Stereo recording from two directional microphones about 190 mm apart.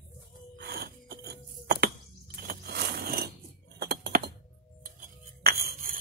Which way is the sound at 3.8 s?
55° right (ahead or behind).